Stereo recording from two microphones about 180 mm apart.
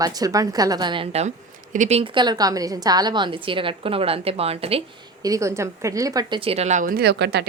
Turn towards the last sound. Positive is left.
turn(degrees=-70)  # may be behind; listen again after turning